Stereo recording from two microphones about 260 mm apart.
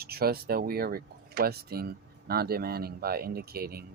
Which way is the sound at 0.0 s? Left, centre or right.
Right.